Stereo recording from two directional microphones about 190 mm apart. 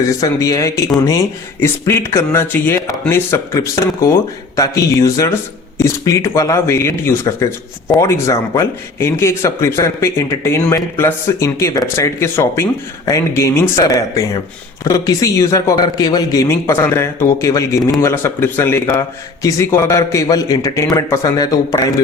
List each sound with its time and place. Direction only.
0.2 s speech: 15° left (ahead or behind)